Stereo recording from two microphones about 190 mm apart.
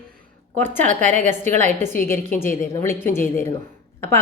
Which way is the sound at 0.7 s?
40° right (ahead or behind).